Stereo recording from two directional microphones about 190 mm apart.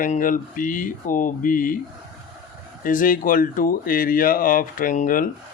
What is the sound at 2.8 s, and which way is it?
Speech, 45° left (ahead or behind).